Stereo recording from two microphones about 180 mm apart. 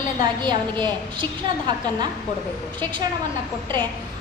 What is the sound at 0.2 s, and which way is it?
A woman's voice, 25° right (ahead or behind).